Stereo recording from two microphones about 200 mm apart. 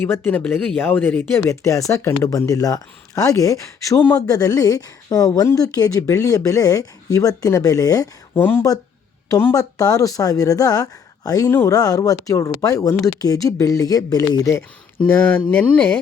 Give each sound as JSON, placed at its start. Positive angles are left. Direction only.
{"t": 0.0, "sound": "speech", "side_deg": 10}